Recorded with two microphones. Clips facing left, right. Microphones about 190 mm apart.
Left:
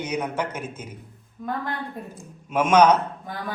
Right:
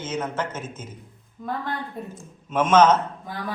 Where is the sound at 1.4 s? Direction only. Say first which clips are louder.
Even; centre (ahead or behind).